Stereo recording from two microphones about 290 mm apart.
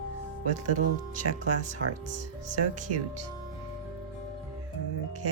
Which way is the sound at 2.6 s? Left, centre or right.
Right.